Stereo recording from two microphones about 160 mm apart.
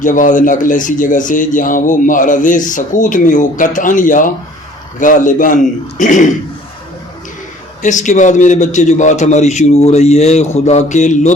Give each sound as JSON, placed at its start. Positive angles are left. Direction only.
{"t": 0.0, "sound": "speech", "side_deg": 55}
{"t": 7.8, "sound": "speech", "side_deg": 50}